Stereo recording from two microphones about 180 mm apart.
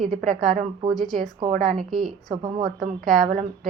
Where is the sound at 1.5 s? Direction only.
45° right (ahead or behind).